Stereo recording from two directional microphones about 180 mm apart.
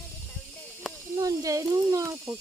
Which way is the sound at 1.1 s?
20° right (ahead or behind).